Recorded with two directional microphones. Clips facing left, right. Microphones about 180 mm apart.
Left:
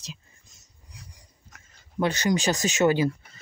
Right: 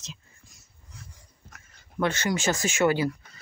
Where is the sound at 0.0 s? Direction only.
20° left (ahead or behind).